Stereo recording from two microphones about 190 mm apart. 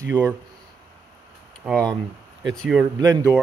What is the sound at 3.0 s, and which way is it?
Speech, 20° right (ahead or behind).